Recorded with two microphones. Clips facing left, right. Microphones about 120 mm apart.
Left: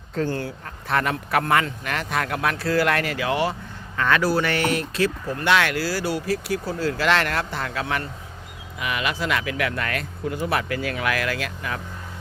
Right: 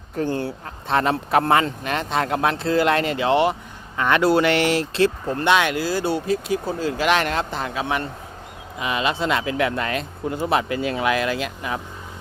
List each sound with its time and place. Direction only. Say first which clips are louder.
0.1 s speech: right 2 dB; 20° right (ahead or behind)